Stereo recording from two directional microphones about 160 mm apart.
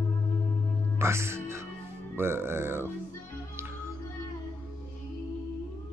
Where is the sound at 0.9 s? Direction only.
15° right (ahead or behind).